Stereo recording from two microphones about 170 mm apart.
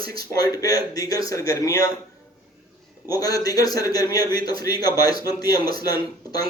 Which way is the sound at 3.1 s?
20° left (ahead or behind).